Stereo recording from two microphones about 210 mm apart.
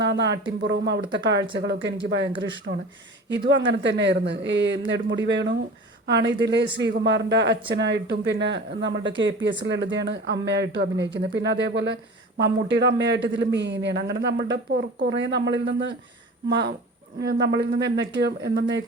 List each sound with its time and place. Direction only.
0.0 s speech: 55° right (ahead or behind)
3.5 s speech: 55° right (ahead or behind)